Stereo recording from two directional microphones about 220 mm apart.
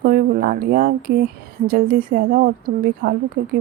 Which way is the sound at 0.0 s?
40° right (ahead or behind).